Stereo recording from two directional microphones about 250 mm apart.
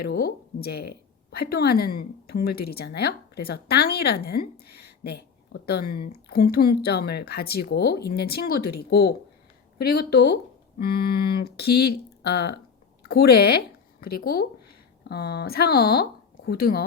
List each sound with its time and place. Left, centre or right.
0.0 s a woman's voice: left